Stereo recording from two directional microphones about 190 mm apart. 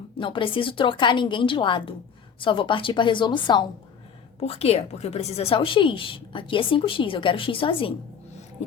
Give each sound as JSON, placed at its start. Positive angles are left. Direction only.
{"t": 0.2, "sound": "a woman's voice", "side_deg": 25}